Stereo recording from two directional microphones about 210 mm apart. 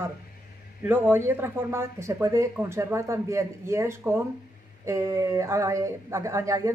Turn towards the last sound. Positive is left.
turn(degrees=-15)  # may be behind; listen again after turning